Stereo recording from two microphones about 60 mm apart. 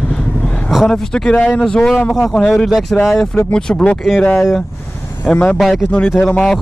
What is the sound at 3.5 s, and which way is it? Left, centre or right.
Speech, centre.